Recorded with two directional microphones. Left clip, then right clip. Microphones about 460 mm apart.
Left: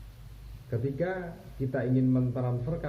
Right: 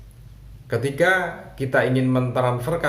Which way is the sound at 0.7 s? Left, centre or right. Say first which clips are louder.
Right 13 dB; centre.